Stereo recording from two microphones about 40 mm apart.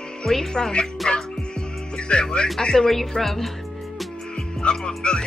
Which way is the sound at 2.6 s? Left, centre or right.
Centre.